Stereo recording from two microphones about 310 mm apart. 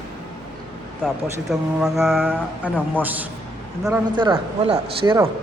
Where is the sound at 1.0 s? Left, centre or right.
Centre.